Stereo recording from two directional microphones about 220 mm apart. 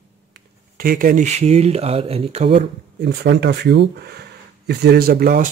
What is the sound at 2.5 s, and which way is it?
Speech, 50° right (ahead or behind).